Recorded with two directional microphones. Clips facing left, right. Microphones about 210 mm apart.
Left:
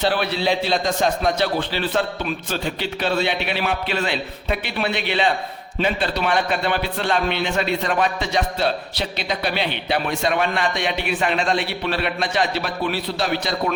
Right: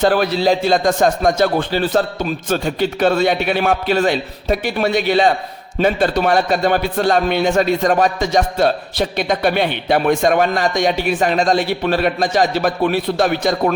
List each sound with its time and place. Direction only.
0.0 s a man's voice: 45° right (ahead or behind)